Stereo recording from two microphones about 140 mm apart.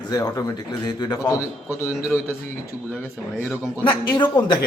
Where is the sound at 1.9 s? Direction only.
5° right (ahead or behind).